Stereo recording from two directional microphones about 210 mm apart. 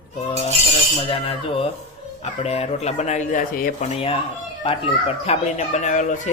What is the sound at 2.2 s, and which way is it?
Speech, 30° left (ahead or behind).